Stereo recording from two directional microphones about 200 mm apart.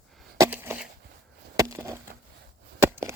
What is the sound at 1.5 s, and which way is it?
Chop, 15° right (ahead or behind).